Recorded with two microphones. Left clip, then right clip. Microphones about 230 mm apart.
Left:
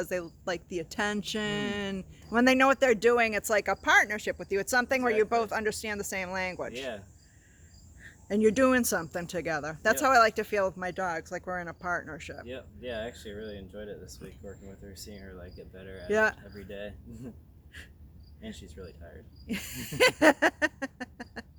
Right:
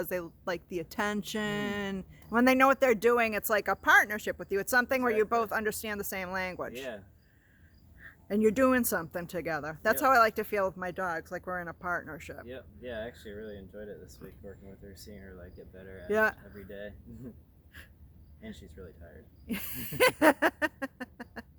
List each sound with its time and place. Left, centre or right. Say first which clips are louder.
0.0 s speech: left 2 dB; centre
8.0 s speech: left 2 dB; centre
12.5 s speech: left 4 dB; centre
16.0 s speech: left 1 dB; centre
16.6 s speech: left 3 dB; centre
17.7 s insect: left 3 dB; centre
18.4 s speech: left 3 dB; centre
19.5 s a sound: left 2 dB; centre